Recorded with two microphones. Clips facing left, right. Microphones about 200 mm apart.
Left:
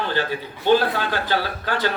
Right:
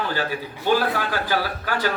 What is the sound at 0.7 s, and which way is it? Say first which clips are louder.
A man's voice: left 3 dB; 25° left (ahead or behind).